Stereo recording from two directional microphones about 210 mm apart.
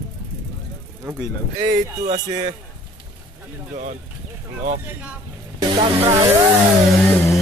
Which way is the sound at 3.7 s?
35° right (ahead or behind).